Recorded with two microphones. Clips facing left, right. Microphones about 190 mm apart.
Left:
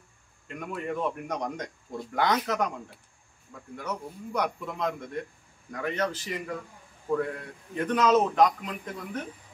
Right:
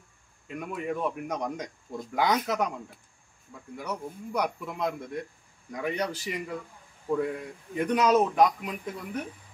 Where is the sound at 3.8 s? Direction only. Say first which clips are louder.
Even; 10° right (ahead or behind).